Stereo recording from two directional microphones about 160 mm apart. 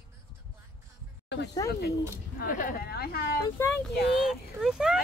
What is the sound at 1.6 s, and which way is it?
Speech, 75° left (ahead or behind).